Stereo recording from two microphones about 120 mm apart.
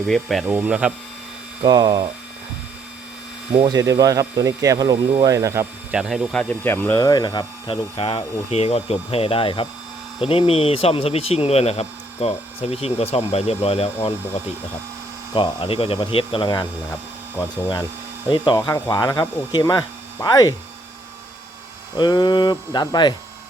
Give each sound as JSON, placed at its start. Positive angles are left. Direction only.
{"t": 0.1, "sound": "speech", "side_deg": 0}
{"t": 0.4, "sound": "speech", "side_deg": -10}
{"t": 1.6, "sound": "speech", "side_deg": -35}
{"t": 3.7, "sound": "speech", "side_deg": -30}
{"t": 5.9, "sound": "speech", "side_deg": -5}
{"t": 6.4, "sound": "speech", "side_deg": 15}
{"t": 7.0, "sound": "speech", "side_deg": 35}
{"t": 7.9, "sound": "speech", "side_deg": 50}
{"t": 15.4, "sound": "speech", "side_deg": 45}
{"t": 18.3, "sound": "speech", "side_deg": 40}
{"t": 21.9, "sound": "speech", "side_deg": 40}